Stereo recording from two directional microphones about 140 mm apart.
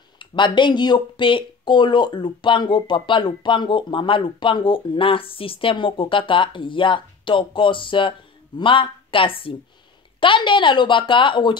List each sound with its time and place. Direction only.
0.2 s speech: 35° left (ahead or behind)